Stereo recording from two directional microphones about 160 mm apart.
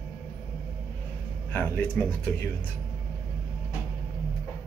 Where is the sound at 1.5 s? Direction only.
15° left (ahead or behind).